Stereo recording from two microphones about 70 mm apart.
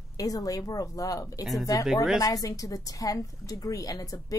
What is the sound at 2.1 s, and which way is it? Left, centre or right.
A woman's voice, left.